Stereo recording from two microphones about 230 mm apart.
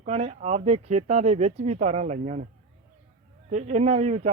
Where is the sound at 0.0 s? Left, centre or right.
Right.